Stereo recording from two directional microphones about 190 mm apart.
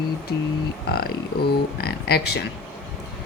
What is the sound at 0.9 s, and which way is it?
Speech, 55° left (ahead or behind).